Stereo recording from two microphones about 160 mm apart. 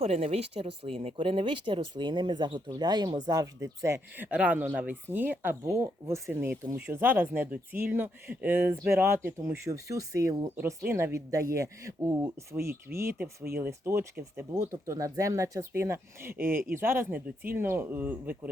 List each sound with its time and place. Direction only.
0.0 s speech: 40° right (ahead or behind); by 18.3 s 10° right (ahead or behind)